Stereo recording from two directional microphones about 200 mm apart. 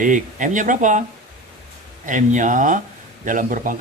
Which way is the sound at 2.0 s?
40° right (ahead or behind).